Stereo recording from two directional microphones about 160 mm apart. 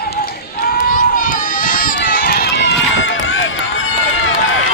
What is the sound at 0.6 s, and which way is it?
Run, 65° left (ahead or behind).